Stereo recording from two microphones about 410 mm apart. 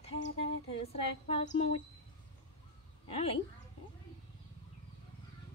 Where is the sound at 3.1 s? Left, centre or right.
Centre.